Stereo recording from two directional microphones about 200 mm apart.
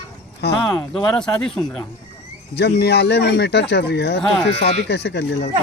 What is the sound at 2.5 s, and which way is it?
Speech, 55° left (ahead or behind).